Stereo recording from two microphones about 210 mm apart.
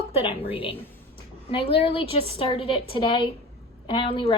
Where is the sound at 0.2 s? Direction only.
25° left (ahead or behind).